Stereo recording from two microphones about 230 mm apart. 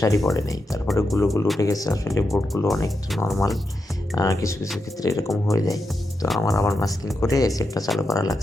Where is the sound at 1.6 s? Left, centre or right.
Centre.